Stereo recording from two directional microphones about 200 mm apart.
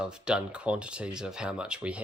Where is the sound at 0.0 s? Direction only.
5° right (ahead or behind).